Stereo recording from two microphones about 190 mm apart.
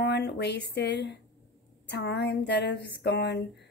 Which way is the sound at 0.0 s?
60° left (ahead or behind).